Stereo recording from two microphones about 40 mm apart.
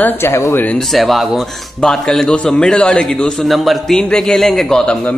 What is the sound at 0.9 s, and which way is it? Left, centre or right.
Speech, centre.